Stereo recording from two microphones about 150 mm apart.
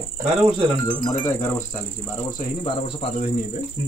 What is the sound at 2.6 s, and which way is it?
Speech, 40° left (ahead or behind).